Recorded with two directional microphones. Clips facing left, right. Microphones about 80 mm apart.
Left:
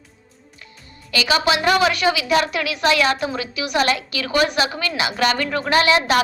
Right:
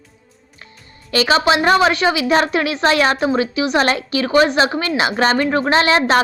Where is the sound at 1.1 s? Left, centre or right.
Right.